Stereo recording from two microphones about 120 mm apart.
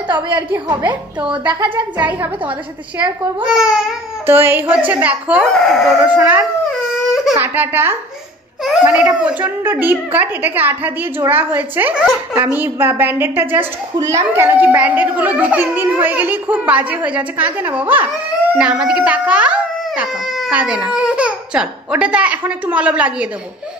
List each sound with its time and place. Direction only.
0.8 s a child's voice: 10° right (ahead or behind)
1.5 s speech: 40° right (ahead or behind)
3.3 s speech: 5° right (ahead or behind)
4.3 s a child's voice: 20° right (ahead or behind)
5.5 s speech: 5° left (ahead or behind)
6.0 s a child's voice: 15° right (ahead or behind)